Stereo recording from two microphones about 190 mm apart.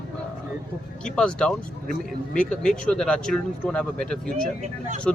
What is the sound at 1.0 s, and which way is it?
Speech, 5° left (ahead or behind).